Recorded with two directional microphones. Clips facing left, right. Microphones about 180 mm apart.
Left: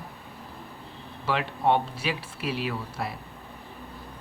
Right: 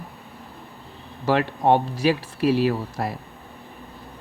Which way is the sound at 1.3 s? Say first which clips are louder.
Right 6 dB; 40° right (ahead or behind).